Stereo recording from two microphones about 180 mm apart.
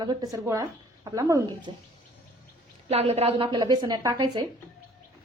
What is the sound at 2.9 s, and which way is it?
A woman's voice, 35° right (ahead or behind).